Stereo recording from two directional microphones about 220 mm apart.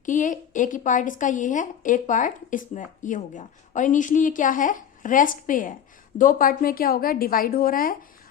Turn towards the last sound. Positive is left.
turn(degrees=40)  # may be behind; listen again after turning